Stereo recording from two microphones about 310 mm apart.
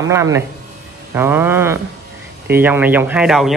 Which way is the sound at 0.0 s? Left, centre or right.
Centre.